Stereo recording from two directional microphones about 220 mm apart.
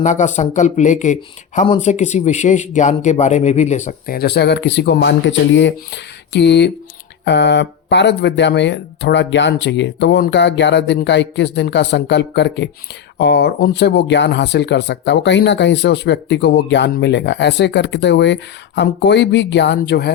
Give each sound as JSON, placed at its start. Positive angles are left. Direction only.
{"t": 0.0, "sound": "speech", "side_deg": 30}